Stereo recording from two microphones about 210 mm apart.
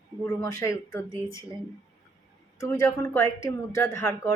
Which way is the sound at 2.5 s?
15° left (ahead or behind).